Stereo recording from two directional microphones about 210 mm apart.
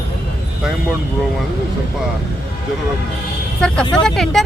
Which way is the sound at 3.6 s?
5° left (ahead or behind).